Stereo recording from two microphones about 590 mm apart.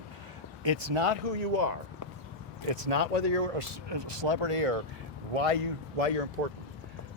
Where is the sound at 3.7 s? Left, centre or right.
Right.